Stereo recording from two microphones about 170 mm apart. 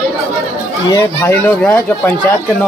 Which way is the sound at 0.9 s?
15° left (ahead or behind).